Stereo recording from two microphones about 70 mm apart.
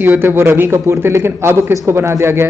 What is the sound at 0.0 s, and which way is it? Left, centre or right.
A man's voice, right.